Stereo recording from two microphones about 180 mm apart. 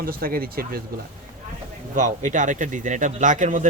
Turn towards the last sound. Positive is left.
turn(degrees=-45)  # may be behind; listen again after turning